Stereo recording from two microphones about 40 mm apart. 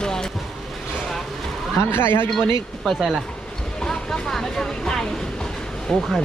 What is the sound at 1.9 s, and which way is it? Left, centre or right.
Speech, left.